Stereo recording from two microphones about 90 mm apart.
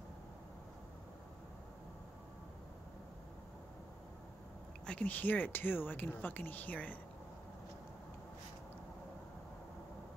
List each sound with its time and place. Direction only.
4.8 s speech: 15° left (ahead or behind)